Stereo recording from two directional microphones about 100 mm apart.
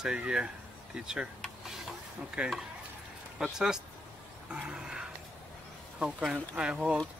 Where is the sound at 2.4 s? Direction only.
10° right (ahead or behind).